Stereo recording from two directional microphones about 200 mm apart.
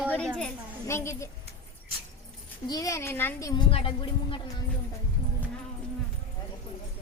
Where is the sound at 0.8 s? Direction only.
15° left (ahead or behind).